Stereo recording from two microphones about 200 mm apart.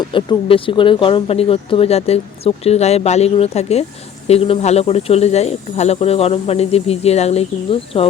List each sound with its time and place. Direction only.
0.0 s speech: 25° left (ahead or behind)